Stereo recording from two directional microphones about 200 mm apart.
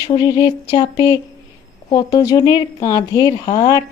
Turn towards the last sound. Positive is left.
turn(degrees=20)  # may be behind; listen again after turning